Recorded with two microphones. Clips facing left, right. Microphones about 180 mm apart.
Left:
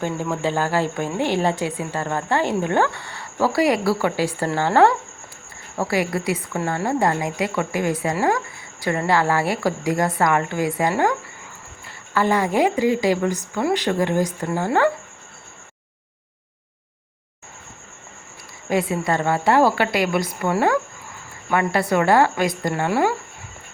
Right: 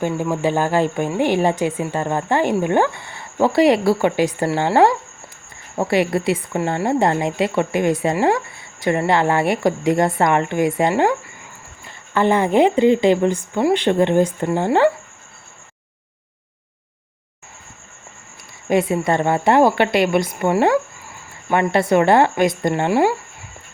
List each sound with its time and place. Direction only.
0.0 s a woman's voice: 15° right (ahead or behind)
12.1 s a woman's voice: 20° right (ahead or behind)
18.7 s a woman's voice: 20° right (ahead or behind)